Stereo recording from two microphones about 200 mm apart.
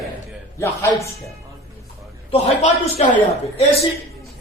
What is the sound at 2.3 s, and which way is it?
Speech, 30° left (ahead or behind).